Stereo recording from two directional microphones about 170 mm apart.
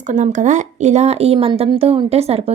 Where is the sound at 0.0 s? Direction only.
45° right (ahead or behind).